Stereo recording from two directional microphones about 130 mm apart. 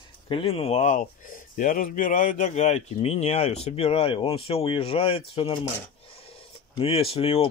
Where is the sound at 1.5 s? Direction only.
90° left; by 5.5 s 45° left (ahead or behind).